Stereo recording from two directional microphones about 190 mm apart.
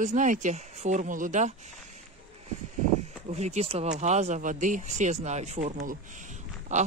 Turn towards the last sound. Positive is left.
turn(degrees=-40)  # may be behind; listen again after turning